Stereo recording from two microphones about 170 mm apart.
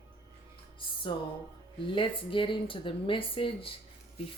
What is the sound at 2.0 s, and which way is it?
Speech, 30° left (ahead or behind).